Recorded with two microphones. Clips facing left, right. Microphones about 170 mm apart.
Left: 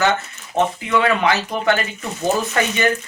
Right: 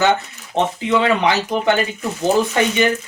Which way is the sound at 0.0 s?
20° right (ahead or behind).